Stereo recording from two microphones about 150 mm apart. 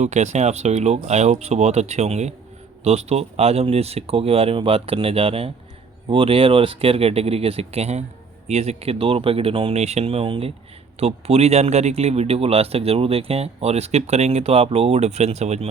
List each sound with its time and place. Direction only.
0.0 s speech: 50° right (ahead or behind)